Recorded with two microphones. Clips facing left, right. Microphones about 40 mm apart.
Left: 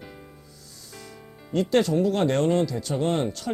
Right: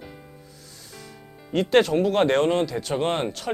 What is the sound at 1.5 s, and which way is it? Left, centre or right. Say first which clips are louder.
Speech: right 3 dB; right.